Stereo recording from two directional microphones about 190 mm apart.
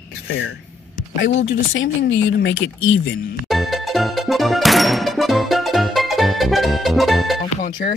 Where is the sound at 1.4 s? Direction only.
80° left.